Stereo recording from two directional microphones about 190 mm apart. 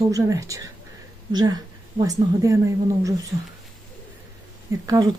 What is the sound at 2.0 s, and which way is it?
Speech, 15° right (ahead or behind).